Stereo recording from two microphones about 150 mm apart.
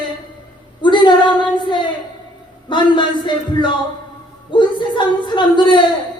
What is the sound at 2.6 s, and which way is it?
A man's voice, 30° left (ahead or behind).